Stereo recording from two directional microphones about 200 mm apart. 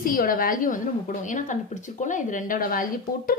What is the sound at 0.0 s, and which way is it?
Speech, 45° left (ahead or behind).